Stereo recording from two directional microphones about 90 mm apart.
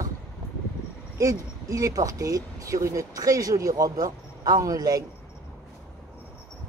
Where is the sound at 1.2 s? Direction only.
40° right (ahead or behind).